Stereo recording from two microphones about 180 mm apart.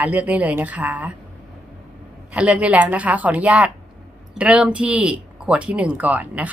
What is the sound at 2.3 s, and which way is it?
A woman's voice, 5° right (ahead or behind).